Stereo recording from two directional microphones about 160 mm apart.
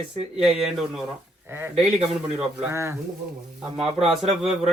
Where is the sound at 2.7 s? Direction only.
15° right (ahead or behind).